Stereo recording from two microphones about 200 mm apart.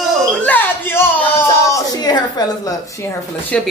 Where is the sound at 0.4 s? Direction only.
10° left (ahead or behind).